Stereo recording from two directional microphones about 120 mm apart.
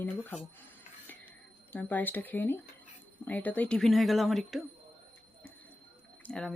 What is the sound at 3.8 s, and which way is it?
Speech, centre (ahead or behind).